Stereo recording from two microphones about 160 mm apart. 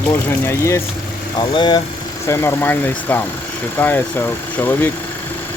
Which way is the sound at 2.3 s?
15° left (ahead or behind).